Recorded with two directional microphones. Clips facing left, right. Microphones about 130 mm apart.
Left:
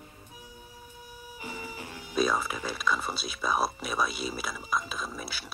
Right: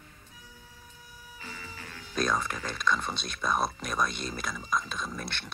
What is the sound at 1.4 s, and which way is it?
Music, 15° left (ahead or behind).